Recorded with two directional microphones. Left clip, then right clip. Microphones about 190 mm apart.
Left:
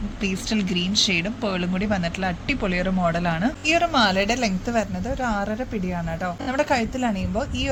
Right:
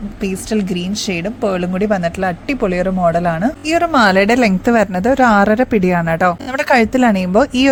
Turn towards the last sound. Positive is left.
turn(degrees=-65)  # may be behind; listen again after turning